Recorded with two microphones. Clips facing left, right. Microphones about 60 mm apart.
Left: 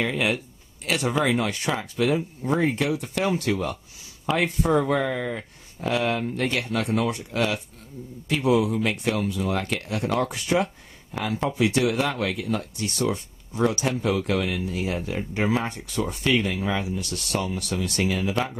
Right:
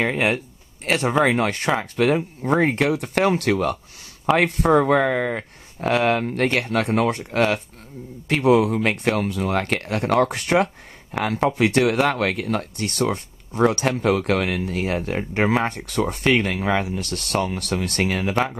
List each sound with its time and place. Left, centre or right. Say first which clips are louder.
0.0 s speech: right 4 dB; right
18.3 s speech: right 4 dB; right